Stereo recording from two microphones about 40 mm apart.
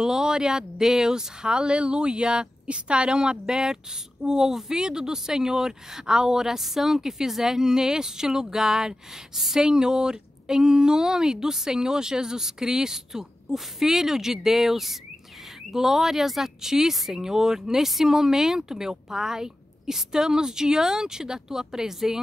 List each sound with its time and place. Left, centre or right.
0.0 s speech: centre